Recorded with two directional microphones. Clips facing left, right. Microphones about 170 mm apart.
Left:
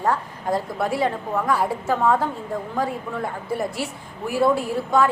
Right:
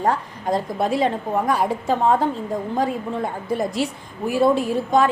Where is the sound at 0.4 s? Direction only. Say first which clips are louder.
Right 2 dB; 20° right (ahead or behind).